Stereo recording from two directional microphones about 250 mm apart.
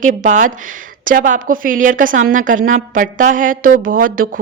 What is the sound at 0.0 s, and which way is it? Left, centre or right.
Speech, right.